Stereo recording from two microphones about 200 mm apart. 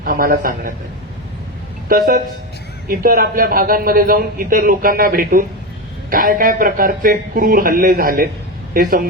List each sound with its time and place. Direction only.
0.0 s a man's voice: 45° right (ahead or behind)
1.9 s a man's voice: 45° right (ahead or behind)